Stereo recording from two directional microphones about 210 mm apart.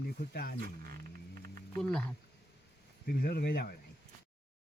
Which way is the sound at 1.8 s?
5° left (ahead or behind).